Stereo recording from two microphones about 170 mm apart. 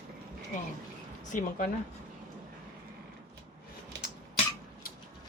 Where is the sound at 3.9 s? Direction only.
90° right.